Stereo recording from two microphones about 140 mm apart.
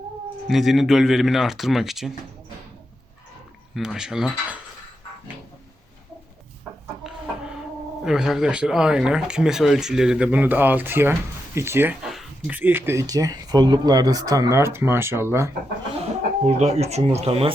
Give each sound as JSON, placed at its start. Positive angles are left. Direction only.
{"t": 0.4, "sound": "speech", "side_deg": 0}
{"t": 3.8, "sound": "speech", "side_deg": -5}
{"t": 7.0, "sound": "chicken", "side_deg": -5}
{"t": 8.0, "sound": "speech", "side_deg": -5}
{"t": 16.5, "sound": "speech", "side_deg": -50}